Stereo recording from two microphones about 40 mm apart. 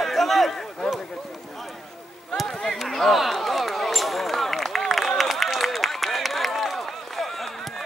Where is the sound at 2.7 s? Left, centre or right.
Centre.